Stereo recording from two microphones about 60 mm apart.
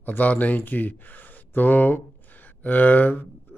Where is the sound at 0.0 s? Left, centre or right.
Left.